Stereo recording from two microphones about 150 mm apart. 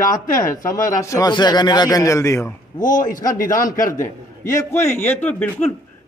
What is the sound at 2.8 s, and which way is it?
A man's voice, 60° left (ahead or behind).